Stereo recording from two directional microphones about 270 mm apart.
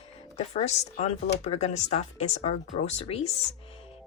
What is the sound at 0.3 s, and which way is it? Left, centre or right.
Speech, left.